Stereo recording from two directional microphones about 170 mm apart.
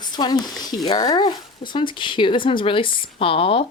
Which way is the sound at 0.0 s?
25° left (ahead or behind).